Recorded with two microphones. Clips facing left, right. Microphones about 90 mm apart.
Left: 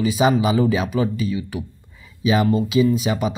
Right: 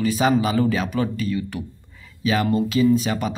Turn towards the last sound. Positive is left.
turn(degrees=10)  # may be behind; listen again after turning